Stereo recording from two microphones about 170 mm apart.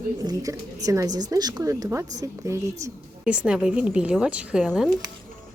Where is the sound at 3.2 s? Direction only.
5° right (ahead or behind).